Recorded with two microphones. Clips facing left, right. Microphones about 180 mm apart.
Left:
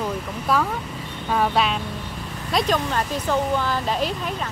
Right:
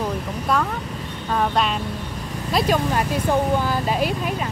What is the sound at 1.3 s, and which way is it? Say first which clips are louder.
Speech: even; 5° left (ahead or behind).